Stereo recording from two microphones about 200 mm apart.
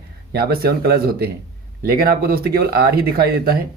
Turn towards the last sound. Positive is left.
turn(degrees=-50)  # may be behind; listen again after turning